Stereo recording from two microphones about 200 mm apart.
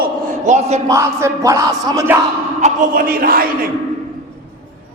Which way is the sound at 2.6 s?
40° right (ahead or behind).